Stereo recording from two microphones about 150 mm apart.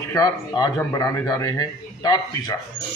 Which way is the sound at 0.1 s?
25° left (ahead or behind).